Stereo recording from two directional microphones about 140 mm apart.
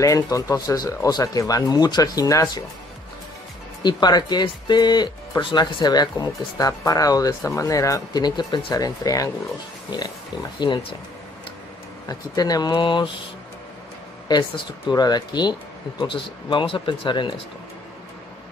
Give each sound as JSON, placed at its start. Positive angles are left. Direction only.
{"t": 0.0, "sound": "speech", "side_deg": 25}
{"t": 3.8, "sound": "speech", "side_deg": 30}
{"t": 12.1, "sound": "speech", "side_deg": 25}
{"t": 14.2, "sound": "speech", "side_deg": 30}